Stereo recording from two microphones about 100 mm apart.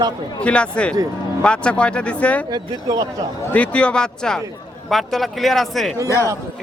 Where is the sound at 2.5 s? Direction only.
35° right (ahead or behind).